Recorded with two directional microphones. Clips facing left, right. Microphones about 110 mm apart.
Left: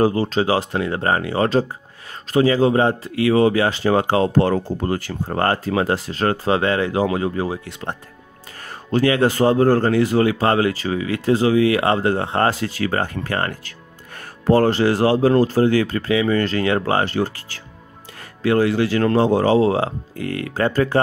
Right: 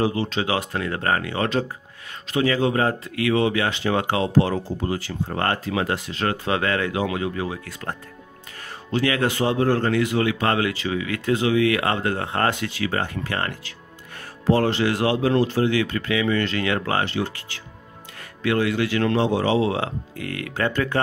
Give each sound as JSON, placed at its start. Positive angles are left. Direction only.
{"t": 0.0, "sound": "speech", "side_deg": 40}
{"t": 4.3, "sound": "speech", "side_deg": 50}
{"t": 5.4, "sound": "speech", "side_deg": 35}
{"t": 8.9, "sound": "speech", "side_deg": 35}